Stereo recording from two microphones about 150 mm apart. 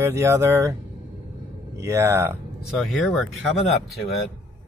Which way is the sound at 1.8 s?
20° right (ahead or behind).